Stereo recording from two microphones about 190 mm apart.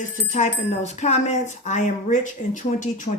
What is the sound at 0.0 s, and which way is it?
Speech, 40° left (ahead or behind).